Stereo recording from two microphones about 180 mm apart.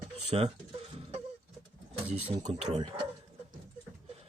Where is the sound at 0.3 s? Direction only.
35° right (ahead or behind).